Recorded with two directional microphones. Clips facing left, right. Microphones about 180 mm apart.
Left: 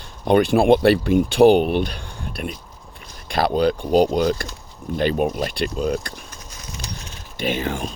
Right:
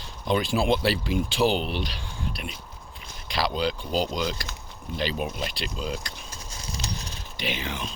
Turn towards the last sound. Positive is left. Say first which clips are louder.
# left 8 dB
turn(degrees=50)  # may be behind; listen again after turning